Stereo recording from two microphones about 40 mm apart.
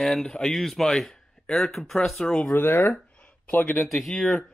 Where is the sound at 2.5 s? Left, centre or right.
Left.